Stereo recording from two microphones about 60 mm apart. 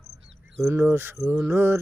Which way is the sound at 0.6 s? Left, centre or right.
Right.